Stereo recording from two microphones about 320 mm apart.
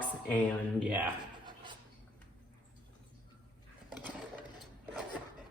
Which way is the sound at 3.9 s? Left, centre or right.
Centre.